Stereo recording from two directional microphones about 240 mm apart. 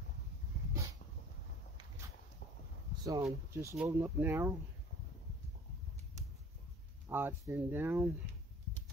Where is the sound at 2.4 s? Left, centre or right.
Left.